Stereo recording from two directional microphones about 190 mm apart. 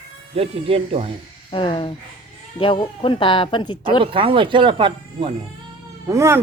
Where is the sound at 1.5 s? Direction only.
25° left (ahead or behind).